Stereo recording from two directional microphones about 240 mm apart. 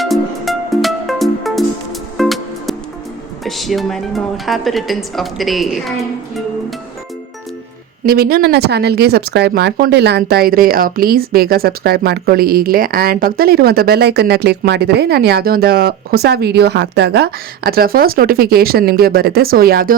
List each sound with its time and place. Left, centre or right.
0.0 s music: centre
3.4 s a woman's voice: centre
8.0 s speech: right